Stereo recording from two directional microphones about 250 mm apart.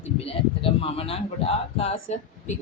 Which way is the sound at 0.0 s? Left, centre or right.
Left.